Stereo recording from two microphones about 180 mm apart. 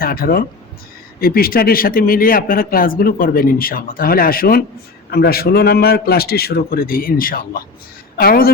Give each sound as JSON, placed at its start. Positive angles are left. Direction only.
{"t": 0.0, "sound": "a man's voice", "side_deg": 55}